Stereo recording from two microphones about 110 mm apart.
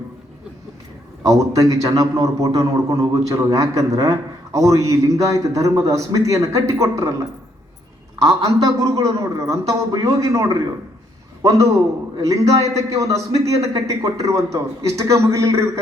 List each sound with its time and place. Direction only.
1.2 s a man's voice: 30° right (ahead or behind)